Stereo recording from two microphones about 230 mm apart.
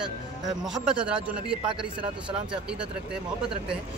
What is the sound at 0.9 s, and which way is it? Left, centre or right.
Speech, centre.